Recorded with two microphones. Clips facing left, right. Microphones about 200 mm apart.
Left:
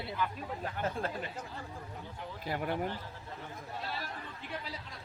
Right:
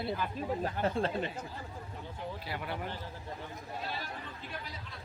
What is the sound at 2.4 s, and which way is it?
Speech, 45° left (ahead or behind).